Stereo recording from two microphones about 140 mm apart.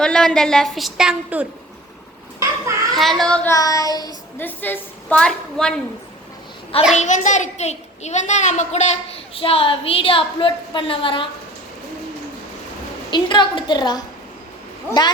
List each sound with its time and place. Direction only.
0.0 s a woman's voice: 5° left (ahead or behind)
2.9 s a woman's voice: centre (ahead or behind)
3.5 s child singing: 25° left (ahead or behind)
4.4 s a woman's voice: 15° left (ahead or behind)
6.9 s a child's voice: 60° left (ahead or behind); by 11.3 s 35° left (ahead or behind)
13.1 s a woman's voice: 35° left (ahead or behind)